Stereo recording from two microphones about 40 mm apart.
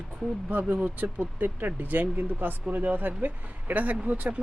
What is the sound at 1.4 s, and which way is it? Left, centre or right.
Speech, right.